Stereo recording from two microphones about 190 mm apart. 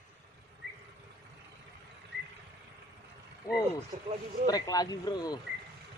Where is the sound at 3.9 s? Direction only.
45° right (ahead or behind).